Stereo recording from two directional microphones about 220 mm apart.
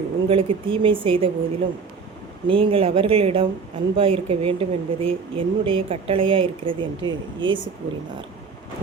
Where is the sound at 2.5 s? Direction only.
25° right (ahead or behind).